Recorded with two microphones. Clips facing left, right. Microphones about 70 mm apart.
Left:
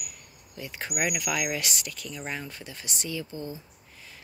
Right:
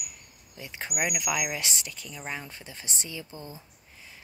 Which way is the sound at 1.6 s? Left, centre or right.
Right.